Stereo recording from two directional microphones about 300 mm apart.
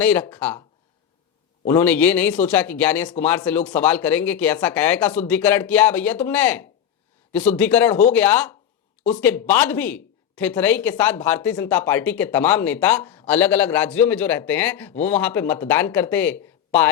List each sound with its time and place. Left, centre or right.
0.0 s speech: centre
1.6 s speech: centre